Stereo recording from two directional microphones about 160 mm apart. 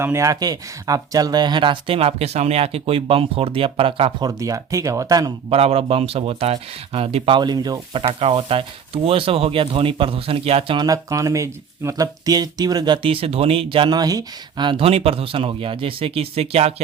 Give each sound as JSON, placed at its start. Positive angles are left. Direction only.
{"t": 0.0, "sound": "speech", "side_deg": -20}
{"t": 4.3, "sound": "speech", "side_deg": -20}
{"t": 5.5, "sound": "speech", "side_deg": -40}
{"t": 8.0, "sound": "speech", "side_deg": -35}
{"t": 10.8, "sound": "speech", "side_deg": -20}